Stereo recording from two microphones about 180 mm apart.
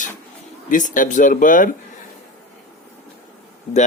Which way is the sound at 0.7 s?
45° left (ahead or behind).